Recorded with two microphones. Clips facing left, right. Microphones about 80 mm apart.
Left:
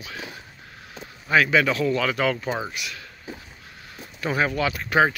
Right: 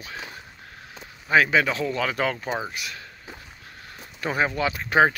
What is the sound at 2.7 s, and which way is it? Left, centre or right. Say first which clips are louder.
Speech: left 1 dB; right.